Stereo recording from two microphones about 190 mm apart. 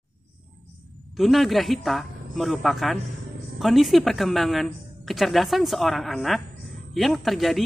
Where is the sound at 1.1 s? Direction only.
Centre (ahead or behind).